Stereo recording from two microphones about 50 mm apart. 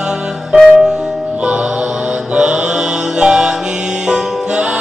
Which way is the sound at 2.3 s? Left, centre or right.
Centre.